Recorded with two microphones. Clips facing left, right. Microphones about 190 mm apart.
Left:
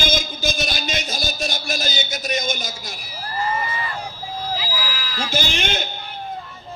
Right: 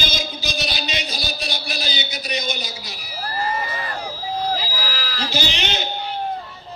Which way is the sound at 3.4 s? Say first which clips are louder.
Left 1 dB; 45° right (ahead or behind).